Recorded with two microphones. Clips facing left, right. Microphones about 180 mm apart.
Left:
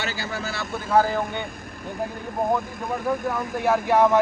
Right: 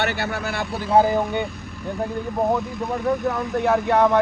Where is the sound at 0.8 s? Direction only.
20° right (ahead or behind).